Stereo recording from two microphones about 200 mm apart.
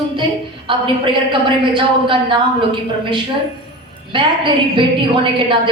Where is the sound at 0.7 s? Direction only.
25° right (ahead or behind).